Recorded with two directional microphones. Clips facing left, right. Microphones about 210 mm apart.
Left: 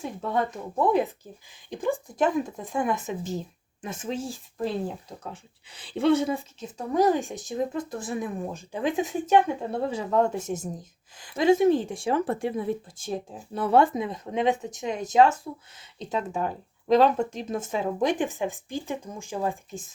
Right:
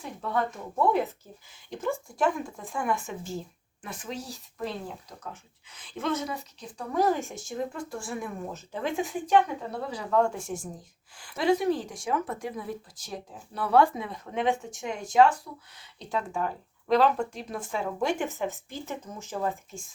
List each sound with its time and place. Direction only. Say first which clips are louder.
0.2 s speech: left 1 dB; 20° left (ahead or behind)